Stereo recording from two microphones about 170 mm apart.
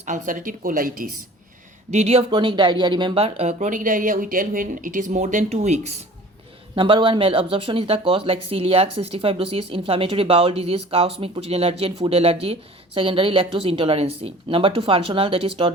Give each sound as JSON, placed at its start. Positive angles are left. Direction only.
{"t": 0.0, "sound": "speech", "side_deg": -50}
{"t": 1.9, "sound": "speech", "side_deg": -40}
{"t": 6.7, "sound": "speech", "side_deg": -30}